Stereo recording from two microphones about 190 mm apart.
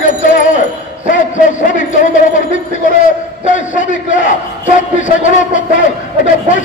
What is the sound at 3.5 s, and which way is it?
Speech, 45° left (ahead or behind).